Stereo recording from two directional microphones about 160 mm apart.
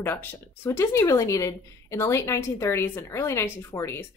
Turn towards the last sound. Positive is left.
turn(degrees=15)  # may be behind; listen again after turning